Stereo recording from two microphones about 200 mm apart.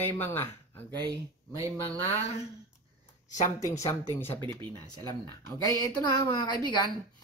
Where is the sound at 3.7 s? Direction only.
15° left (ahead or behind).